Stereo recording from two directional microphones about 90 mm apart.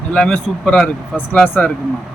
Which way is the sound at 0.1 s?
10° left (ahead or behind).